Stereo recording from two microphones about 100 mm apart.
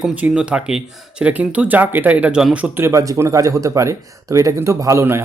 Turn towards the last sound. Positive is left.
turn(degrees=-25)  # may be behind; listen again after turning